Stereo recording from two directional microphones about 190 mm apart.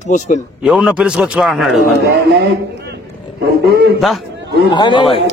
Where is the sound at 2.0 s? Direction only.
55° right (ahead or behind).